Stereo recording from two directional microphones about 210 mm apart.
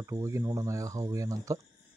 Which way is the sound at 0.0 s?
15° right (ahead or behind).